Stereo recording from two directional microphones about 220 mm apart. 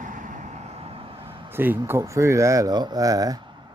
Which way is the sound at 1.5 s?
10° right (ahead or behind).